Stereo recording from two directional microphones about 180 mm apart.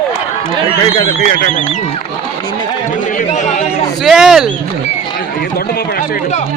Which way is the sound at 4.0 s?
Centre (ahead or behind).